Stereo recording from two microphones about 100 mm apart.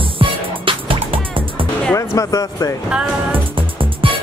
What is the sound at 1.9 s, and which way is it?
Speech, 35° left (ahead or behind).